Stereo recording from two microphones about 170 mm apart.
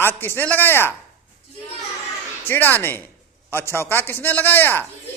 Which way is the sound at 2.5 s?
10° left (ahead or behind).